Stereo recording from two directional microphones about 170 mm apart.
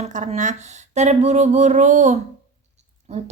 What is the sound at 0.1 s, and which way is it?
A woman's voice, 45° right (ahead or behind).